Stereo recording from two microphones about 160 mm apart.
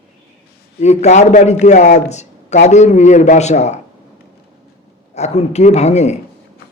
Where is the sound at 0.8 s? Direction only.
45° left (ahead or behind).